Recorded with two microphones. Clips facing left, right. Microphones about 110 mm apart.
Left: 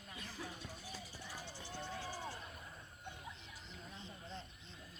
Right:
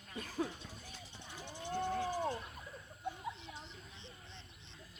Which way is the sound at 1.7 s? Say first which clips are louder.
Right 11 dB; 50° right (ahead or behind).